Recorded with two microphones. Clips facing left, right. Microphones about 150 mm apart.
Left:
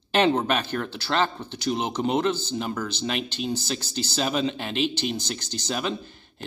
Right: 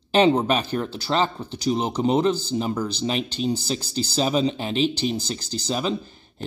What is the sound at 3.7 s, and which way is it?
Speech, 5° right (ahead or behind).